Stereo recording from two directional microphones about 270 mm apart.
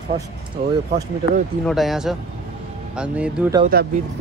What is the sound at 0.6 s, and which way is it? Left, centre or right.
Speech, right.